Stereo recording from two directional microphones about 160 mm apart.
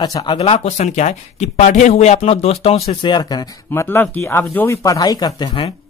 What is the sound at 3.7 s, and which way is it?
Speech, 15° left (ahead or behind).